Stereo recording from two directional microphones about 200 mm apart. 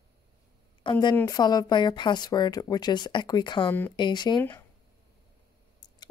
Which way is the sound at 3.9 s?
20° left (ahead or behind).